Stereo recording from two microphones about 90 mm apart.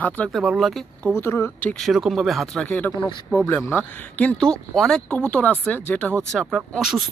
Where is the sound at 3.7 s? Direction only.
20° left (ahead or behind).